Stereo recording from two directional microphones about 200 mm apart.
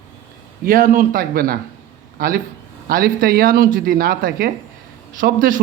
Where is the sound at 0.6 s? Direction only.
45° right (ahead or behind).